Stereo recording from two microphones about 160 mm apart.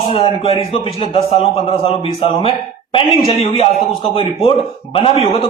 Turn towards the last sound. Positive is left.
turn(degrees=40)  # may be behind; listen again after turning